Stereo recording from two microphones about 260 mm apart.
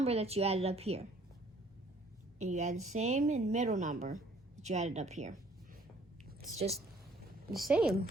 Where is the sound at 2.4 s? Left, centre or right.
Right.